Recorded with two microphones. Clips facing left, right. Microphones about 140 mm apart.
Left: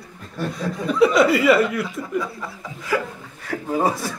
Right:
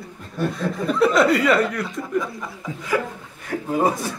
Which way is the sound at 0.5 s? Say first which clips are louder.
Right 1 dB; centre (ahead or behind).